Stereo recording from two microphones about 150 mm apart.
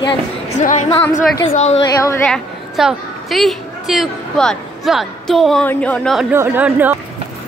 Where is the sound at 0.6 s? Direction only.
55° left (ahead or behind).